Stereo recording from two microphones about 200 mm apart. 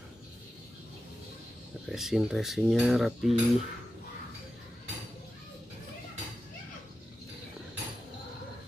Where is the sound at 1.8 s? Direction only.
Centre (ahead or behind).